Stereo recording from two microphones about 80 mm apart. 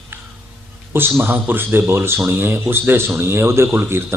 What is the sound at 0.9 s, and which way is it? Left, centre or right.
A man's voice, right.